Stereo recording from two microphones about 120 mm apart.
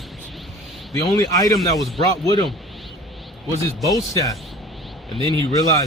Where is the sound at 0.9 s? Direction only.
30° left (ahead or behind).